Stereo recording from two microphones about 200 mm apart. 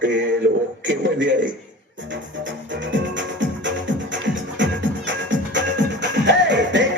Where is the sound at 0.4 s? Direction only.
65° right (ahead or behind).